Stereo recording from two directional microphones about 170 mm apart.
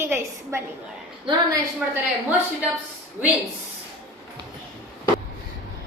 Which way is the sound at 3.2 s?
10° right (ahead or behind).